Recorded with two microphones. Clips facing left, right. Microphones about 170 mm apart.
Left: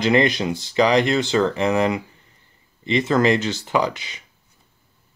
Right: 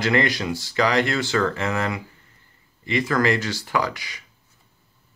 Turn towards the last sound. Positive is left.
turn(degrees=20)  # may be behind; listen again after turning